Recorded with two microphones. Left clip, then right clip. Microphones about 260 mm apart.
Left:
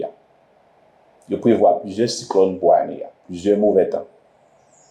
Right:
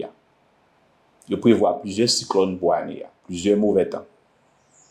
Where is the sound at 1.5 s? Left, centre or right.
Right.